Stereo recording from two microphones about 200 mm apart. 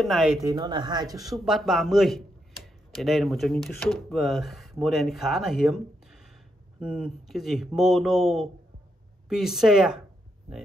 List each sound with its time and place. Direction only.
0.0 s speech: centre (ahead or behind)
0.4 s a man's voice: 20° right (ahead or behind)
1.4 s speech: centre (ahead or behind)